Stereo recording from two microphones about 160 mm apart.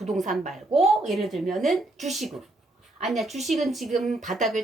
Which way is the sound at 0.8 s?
Centre (ahead or behind).